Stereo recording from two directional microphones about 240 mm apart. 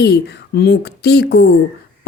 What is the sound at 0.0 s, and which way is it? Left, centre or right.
Speech, left.